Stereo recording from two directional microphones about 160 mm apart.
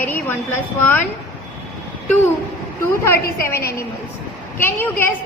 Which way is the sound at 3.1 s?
15° left (ahead or behind).